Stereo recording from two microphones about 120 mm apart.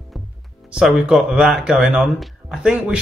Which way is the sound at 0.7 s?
5° right (ahead or behind).